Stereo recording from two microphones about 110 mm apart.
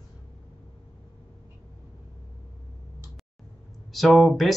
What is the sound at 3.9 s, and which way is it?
Speech, centre (ahead or behind).